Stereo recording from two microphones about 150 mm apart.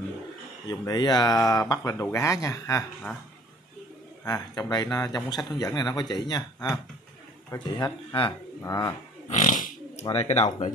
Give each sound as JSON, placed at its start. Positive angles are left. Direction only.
{"t": 0.7, "sound": "speech", "side_deg": 25}
{"t": 4.2, "sound": "speech", "side_deg": 25}
{"t": 9.3, "sound": "a sound", "side_deg": 55}
{"t": 10.0, "sound": "speech", "side_deg": 45}